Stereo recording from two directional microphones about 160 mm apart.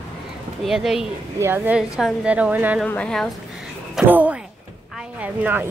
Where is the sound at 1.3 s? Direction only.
15° right (ahead or behind).